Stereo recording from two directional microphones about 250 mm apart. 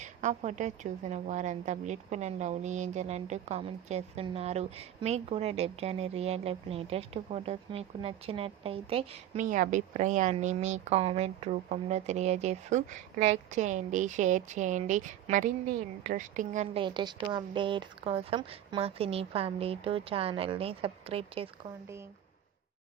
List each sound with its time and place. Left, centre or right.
0.0 s a woman's voice: right